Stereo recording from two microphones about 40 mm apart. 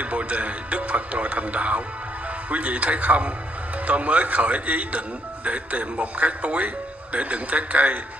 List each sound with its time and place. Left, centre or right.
0.0 s speech: right